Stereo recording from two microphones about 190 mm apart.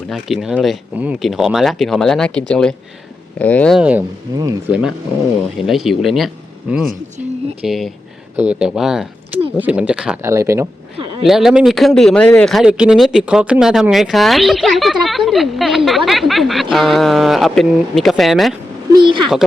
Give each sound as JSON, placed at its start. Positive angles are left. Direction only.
{"t": 0.1, "sound": "speech", "side_deg": 0}
{"t": 3.8, "sound": "speech", "side_deg": -5}
{"t": 4.3, "sound": "speech", "side_deg": -20}
{"t": 4.7, "sound": "speech", "side_deg": -5}
{"t": 10.2, "sound": "speech", "side_deg": -15}
{"t": 11.2, "sound": "speech", "side_deg": 0}